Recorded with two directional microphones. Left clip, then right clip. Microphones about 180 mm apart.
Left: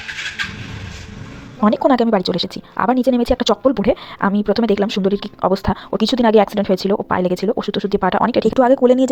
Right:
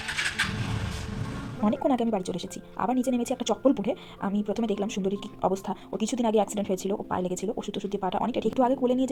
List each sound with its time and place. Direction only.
1.9 s a woman's voice: 25° left (ahead or behind)